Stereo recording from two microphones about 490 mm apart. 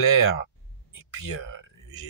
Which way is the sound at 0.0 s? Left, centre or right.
Left.